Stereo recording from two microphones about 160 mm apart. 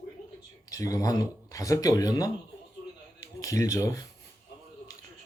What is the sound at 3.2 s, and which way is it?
Speech, 20° left (ahead or behind).